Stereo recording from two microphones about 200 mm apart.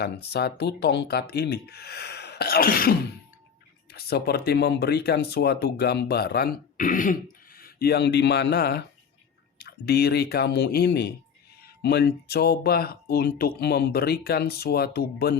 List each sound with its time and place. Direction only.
0.0 s speech: 55° left (ahead or behind)